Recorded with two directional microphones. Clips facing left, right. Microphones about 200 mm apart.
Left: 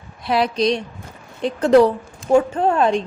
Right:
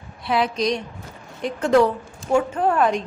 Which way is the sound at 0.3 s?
35° left (ahead or behind).